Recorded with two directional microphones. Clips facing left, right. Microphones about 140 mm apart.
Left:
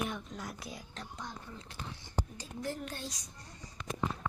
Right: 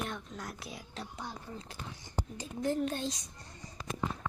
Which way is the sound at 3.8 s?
35° right (ahead or behind).